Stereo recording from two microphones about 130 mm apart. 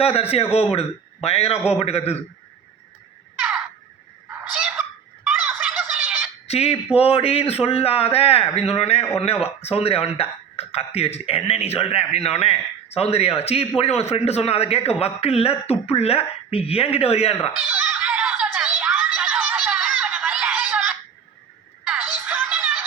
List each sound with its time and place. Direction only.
0.0 s a man's voice: 50° left (ahead or behind)
6.0 s fowl: 15° right (ahead or behind)
6.5 s a man's voice: 50° left (ahead or behind)
17.7 s giggle: 10° right (ahead or behind)
19.5 s snicker: 15° right (ahead or behind)
20.2 s a sound: 10° right (ahead or behind)
21.8 s music: 15° right (ahead or behind)